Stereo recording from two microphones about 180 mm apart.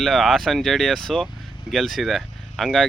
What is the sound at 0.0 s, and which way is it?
Speech, centre (ahead or behind).